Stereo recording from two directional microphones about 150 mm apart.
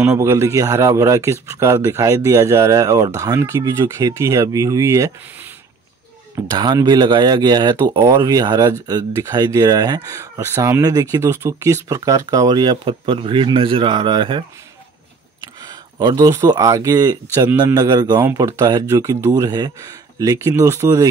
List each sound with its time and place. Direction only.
0.2 s speech: 20° right (ahead or behind)
15.6 s speech: 25° right (ahead or behind)